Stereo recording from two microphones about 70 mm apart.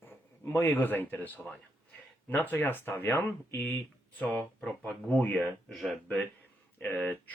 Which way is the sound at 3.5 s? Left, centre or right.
Left.